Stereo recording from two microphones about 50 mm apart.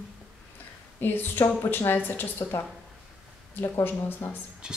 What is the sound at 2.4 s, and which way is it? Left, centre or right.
Speech, left.